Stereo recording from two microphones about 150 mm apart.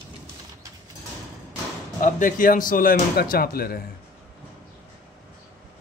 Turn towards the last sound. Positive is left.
turn(degrees=85)